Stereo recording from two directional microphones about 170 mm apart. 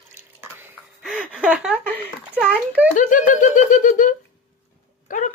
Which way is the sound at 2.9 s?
50° left (ahead or behind).